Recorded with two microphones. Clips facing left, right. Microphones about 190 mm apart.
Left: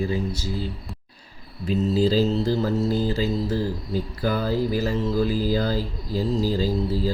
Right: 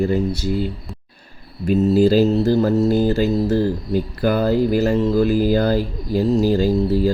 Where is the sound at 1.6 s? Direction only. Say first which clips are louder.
Right 6 dB; 65° right (ahead or behind).